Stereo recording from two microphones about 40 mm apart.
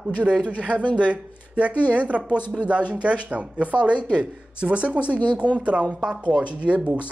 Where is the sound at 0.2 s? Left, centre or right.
Right.